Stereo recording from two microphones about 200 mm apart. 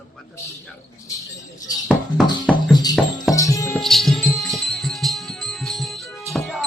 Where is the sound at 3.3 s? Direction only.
15° left (ahead or behind).